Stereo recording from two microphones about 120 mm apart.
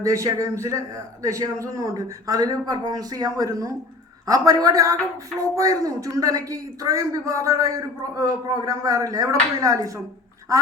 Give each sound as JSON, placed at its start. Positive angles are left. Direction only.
{"t": 0.0, "sound": "a man's voice", "side_deg": -25}